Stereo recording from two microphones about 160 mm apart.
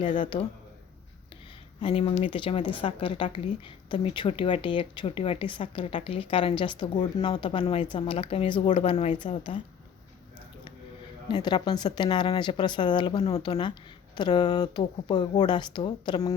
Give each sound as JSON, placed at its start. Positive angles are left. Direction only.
{"t": 0.2, "sound": "a woman's voice", "side_deg": 30}
{"t": 1.8, "sound": "a woman's voice", "side_deg": 35}
{"t": 11.3, "sound": "speech", "side_deg": 25}